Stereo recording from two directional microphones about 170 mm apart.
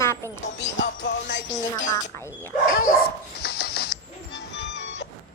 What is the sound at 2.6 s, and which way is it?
Speech, 55° left (ahead or behind).